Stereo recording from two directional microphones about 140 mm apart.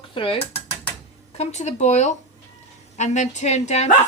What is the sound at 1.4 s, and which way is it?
Speech, 50° left (ahead or behind).